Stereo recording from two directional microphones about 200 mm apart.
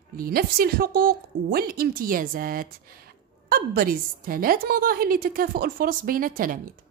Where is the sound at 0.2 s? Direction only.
50° right (ahead or behind).